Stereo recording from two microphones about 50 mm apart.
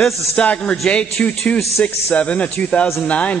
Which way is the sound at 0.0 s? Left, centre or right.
Centre.